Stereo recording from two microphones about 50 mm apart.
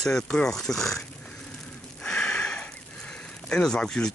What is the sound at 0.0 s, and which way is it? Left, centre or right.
Speech, centre.